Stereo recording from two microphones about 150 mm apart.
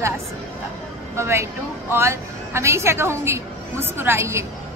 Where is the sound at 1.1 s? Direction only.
20° right (ahead or behind).